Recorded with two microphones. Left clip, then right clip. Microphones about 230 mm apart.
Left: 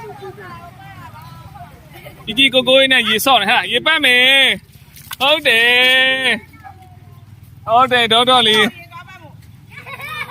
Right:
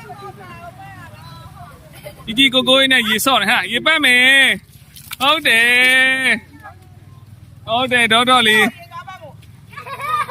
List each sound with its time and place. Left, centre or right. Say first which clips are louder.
2.2 s speech: left 1 dB; centre
7.7 s speech: left 2 dB; centre